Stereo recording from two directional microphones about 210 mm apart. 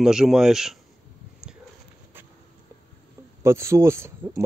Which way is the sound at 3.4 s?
15° right (ahead or behind).